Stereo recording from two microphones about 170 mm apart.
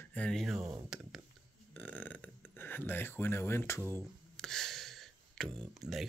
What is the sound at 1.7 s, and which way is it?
Speech, 10° left (ahead or behind).